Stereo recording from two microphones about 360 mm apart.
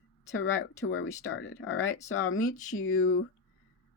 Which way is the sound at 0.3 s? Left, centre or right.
Left.